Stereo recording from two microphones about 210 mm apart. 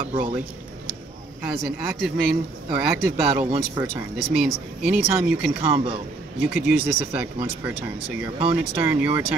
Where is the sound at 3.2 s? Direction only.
40° right (ahead or behind).